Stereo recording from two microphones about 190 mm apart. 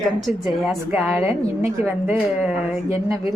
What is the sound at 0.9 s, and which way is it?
Speech, 5° right (ahead or behind).